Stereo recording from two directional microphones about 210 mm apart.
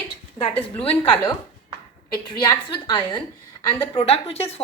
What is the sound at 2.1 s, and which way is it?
Speech, 20° left (ahead or behind).